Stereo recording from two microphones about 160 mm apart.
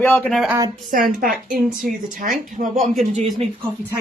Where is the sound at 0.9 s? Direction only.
65° right (ahead or behind).